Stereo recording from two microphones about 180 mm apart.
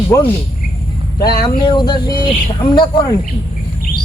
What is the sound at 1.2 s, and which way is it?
Speech, 60° left (ahead or behind).